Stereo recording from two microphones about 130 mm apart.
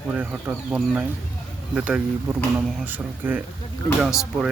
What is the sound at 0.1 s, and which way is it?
Speech, 10° right (ahead or behind).